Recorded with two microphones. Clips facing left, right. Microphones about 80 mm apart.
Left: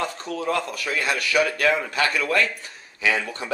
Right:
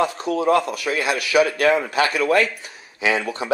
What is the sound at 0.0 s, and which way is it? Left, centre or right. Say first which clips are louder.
Speech: right 7 dB; centre.